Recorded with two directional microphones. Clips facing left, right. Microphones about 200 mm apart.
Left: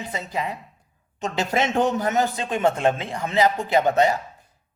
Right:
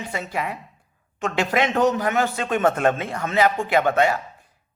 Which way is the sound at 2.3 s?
30° left (ahead or behind).